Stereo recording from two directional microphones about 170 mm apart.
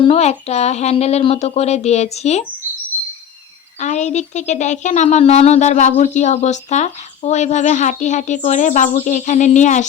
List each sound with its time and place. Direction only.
0.0 s speech: 35° left (ahead or behind)
3.8 s speech: 45° left (ahead or behind)